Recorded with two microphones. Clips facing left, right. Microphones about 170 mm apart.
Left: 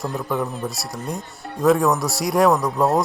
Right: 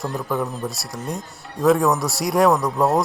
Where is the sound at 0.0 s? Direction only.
Centre (ahead or behind).